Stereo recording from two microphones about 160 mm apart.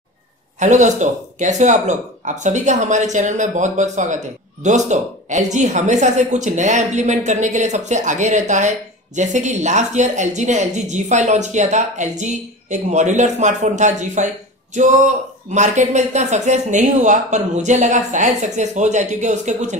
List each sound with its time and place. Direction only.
0.6 s a woman's voice: 50° right (ahead or behind)